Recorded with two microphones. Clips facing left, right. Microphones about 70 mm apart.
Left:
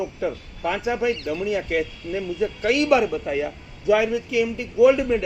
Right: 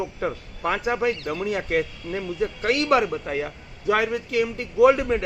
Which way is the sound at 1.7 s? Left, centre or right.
Right.